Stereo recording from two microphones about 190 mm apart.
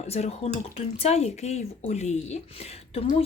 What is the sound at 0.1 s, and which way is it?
Speech, 35° left (ahead or behind).